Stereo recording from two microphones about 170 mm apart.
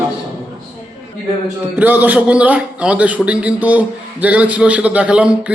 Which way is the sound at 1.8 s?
10° right (ahead or behind).